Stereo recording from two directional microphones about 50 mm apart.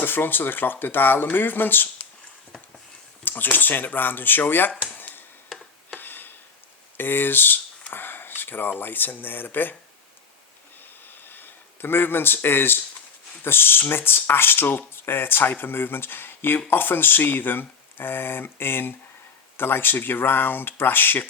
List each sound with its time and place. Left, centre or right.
0.0 s speech: left
3.2 s speech: left
4.9 s a sound: left
6.9 s speech: left
11.0 s a sound: left
13.4 s speech: left